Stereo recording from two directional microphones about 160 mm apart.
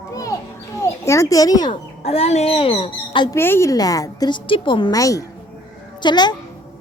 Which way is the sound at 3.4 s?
15° left (ahead or behind).